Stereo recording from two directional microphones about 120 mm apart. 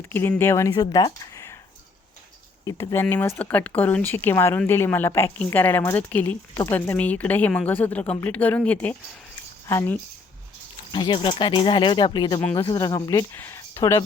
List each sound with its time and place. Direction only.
0.1 s speech: 20° left (ahead or behind)
2.6 s a woman's voice: 25° left (ahead or behind)
10.9 s speech: 40° left (ahead or behind)
13.3 s speech: 15° left (ahead or behind)